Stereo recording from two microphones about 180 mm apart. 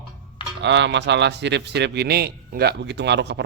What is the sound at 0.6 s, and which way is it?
Speech, 80° right.